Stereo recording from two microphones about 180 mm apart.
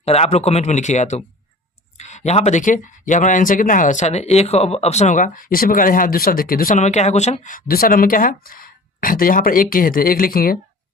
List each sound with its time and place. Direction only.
0.0 s speech: 35° left (ahead or behind); by 10.6 s 55° left (ahead or behind)